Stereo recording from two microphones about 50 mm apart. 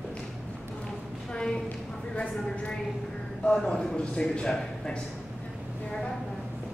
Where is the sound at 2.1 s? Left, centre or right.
Left.